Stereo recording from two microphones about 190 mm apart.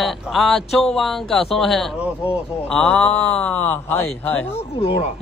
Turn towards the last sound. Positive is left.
turn(degrees=30)  # may be behind; listen again after turning